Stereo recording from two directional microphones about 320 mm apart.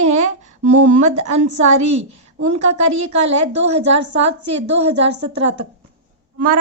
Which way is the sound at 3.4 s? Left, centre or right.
Right.